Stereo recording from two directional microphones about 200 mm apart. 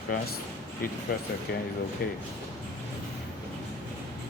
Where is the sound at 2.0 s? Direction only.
50° left (ahead or behind).